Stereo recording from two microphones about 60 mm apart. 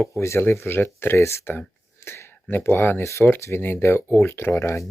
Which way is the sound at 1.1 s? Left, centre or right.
Left.